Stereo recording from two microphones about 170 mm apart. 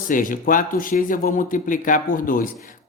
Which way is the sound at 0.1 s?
55° left (ahead or behind).